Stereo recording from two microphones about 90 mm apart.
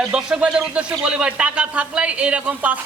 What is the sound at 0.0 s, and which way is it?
A woman's voice, 5° right (ahead or behind).